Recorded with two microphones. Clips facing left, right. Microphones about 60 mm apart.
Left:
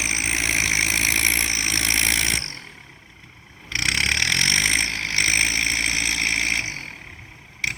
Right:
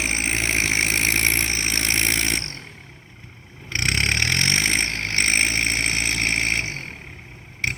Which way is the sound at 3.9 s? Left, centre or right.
Right.